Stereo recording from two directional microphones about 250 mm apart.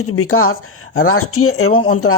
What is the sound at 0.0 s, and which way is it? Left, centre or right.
Speech, left.